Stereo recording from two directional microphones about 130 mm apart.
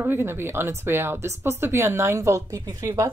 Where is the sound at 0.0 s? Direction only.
15° right (ahead or behind).